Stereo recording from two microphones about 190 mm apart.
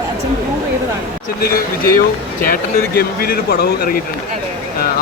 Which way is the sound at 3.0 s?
55° left (ahead or behind).